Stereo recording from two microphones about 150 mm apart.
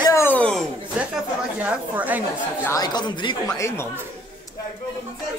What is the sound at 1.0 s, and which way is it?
Chatter, 10° right (ahead or behind).